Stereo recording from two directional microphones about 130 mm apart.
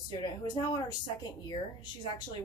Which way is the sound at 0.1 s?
35° left (ahead or behind).